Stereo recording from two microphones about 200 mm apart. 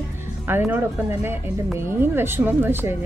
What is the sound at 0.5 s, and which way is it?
Speech, 10° right (ahead or behind).